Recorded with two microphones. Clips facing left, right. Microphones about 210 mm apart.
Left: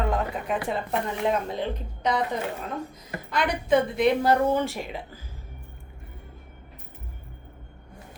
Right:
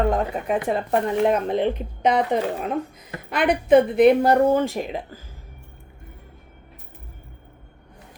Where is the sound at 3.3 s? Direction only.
55° right (ahead or behind).